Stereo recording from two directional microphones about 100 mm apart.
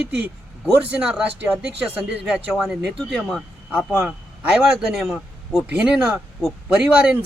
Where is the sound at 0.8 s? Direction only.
10° right (ahead or behind).